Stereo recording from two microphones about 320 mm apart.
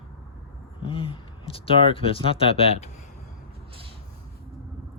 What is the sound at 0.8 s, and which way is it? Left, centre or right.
Speech, centre.